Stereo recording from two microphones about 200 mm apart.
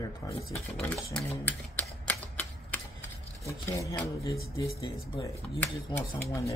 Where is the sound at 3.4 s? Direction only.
15° left (ahead or behind).